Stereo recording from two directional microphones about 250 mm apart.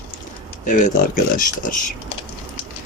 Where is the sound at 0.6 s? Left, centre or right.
Left.